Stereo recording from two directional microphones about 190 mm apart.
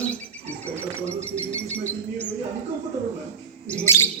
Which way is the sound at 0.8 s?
15° right (ahead or behind).